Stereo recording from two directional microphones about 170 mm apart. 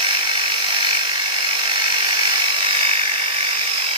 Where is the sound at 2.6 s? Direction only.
35° right (ahead or behind).